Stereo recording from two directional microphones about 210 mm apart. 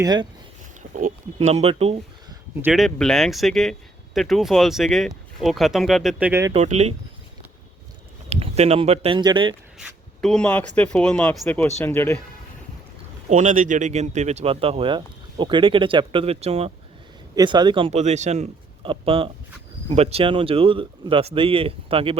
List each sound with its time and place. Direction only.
0.0 s speech: 20° right (ahead or behind)
0.9 s speech: 35° right (ahead or behind)
2.6 s speech: 10° right (ahead or behind)
2.8 s speech: centre (ahead or behind)
6.5 s speech: 30° right (ahead or behind)
8.3 s speech: 30° right (ahead or behind)
9.7 s zipper: centre (ahead or behind)
10.8 s speech: 5° left (ahead or behind)
13.3 s speech: 35° right (ahead or behind)